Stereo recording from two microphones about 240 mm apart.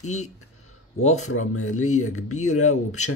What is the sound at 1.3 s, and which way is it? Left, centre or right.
Speech, left.